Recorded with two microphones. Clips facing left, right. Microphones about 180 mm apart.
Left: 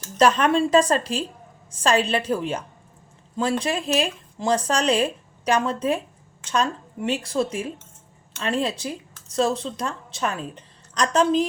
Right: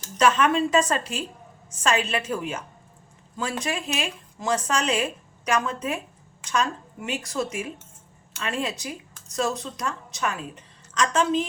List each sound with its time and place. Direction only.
0.2 s a woman's voice: 35° left (ahead or behind)